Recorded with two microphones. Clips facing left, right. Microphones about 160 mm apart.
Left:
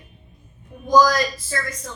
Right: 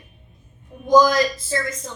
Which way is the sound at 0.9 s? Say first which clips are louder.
Right 2 dB; 20° right (ahead or behind).